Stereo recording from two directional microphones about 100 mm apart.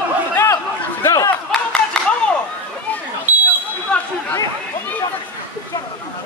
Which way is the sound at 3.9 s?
10° left (ahead or behind).